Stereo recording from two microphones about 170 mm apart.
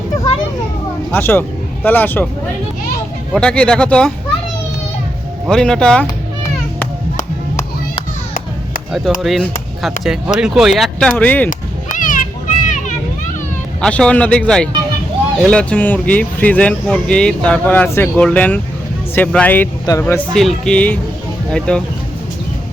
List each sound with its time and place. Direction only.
1.1 s speech: 15° left (ahead or behind)
3.3 s speech: 5° left (ahead or behind)
5.5 s speech: 5° left (ahead or behind)
9.2 s speech: centre (ahead or behind)
11.4 s children playing: 50° left (ahead or behind)
13.8 s speech: 5° left (ahead or behind)
20.3 s speech: centre (ahead or behind)